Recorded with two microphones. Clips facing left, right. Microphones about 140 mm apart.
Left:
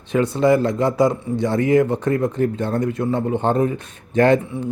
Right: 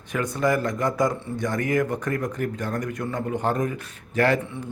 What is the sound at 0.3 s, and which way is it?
Speech, 25° left (ahead or behind).